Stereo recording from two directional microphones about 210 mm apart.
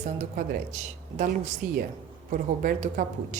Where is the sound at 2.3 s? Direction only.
40° right (ahead or behind).